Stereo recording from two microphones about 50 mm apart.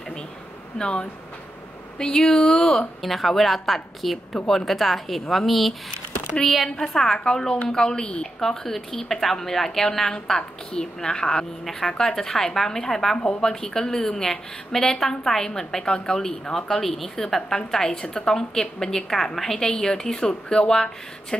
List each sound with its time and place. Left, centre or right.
0.7 s a woman's voice: centre
3.0 s a woman's voice: centre
8.4 s a woman's voice: centre